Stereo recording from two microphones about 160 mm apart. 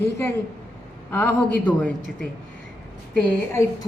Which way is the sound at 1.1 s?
10° left (ahead or behind).